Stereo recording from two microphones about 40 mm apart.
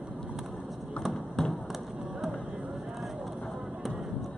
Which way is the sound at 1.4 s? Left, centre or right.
Centre.